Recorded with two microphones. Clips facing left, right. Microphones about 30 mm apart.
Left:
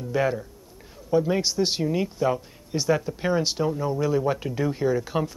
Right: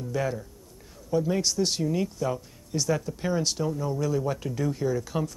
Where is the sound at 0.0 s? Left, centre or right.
Left.